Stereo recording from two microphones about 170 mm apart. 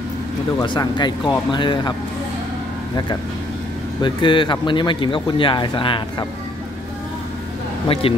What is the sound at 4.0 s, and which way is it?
Speech, 30° left (ahead or behind).